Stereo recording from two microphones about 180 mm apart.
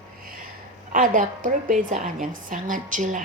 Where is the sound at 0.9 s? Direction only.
45° right (ahead or behind).